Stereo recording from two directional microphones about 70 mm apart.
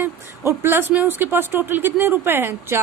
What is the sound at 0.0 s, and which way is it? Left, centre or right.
Speech, right.